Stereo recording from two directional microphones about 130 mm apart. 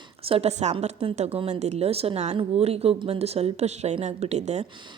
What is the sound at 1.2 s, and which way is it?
Speech, 50° right (ahead or behind).